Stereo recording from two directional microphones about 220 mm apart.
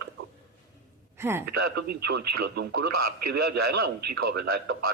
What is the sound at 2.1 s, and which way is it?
Speech, 50° right (ahead or behind).